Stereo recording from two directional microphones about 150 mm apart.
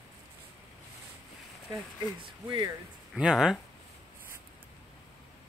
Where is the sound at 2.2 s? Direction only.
30° right (ahead or behind).